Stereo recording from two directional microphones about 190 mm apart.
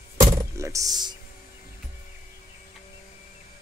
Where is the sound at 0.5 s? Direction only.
15° right (ahead or behind).